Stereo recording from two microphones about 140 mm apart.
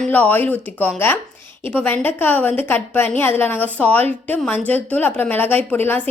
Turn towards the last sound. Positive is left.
turn(degrees=15)  # may be behind; listen again after turning